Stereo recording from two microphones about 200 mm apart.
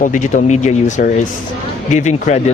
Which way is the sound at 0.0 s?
40° left (ahead or behind).